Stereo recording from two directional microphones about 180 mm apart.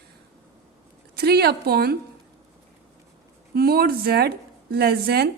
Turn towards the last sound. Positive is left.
turn(degrees=-60)  # may be behind; listen again after turning